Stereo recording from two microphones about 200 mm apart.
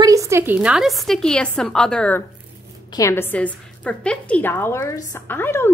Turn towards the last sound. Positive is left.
turn(degrees=10)  # may be behind; listen again after turning